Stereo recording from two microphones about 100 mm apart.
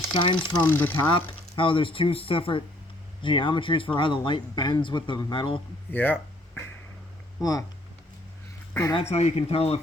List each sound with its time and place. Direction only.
0.1 s speech: 55° left (ahead or behind)
0.6 s speech: 20° left (ahead or behind)
1.3 s speech: 60° left (ahead or behind)
5.9 s speech: 20° left (ahead or behind)
9.0 s speech: 90° left